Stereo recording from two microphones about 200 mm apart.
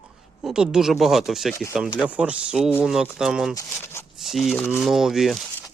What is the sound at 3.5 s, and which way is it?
Speech, 15° left (ahead or behind).